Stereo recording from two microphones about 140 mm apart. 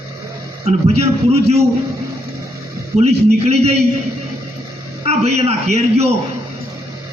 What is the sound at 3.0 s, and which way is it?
Speech, 50° right (ahead or behind).